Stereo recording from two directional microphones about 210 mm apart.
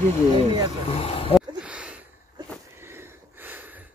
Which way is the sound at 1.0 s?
25° left (ahead or behind).